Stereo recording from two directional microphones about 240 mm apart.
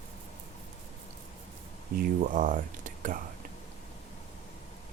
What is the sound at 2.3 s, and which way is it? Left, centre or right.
Speech, right.